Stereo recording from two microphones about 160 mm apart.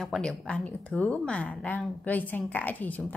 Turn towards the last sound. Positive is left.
turn(degrees=10)  # may be behind; listen again after turning